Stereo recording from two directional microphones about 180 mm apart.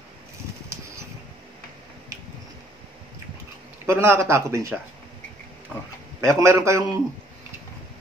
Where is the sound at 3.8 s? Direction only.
15° right (ahead or behind).